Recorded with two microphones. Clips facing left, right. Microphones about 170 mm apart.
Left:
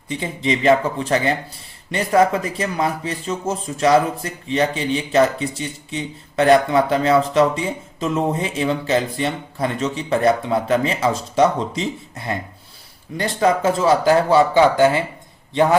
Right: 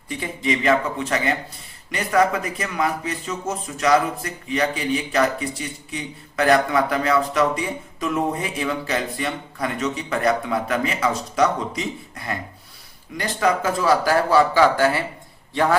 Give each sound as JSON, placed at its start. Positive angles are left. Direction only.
{"t": 0.1, "sound": "speech", "side_deg": 25}